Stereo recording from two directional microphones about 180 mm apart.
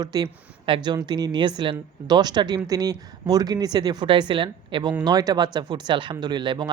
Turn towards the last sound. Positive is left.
turn(degrees=-25)  # may be behind; listen again after turning